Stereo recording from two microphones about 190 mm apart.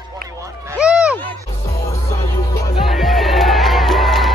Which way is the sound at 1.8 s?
15° left (ahead or behind).